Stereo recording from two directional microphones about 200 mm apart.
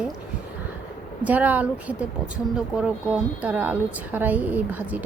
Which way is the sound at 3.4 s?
10° right (ahead or behind).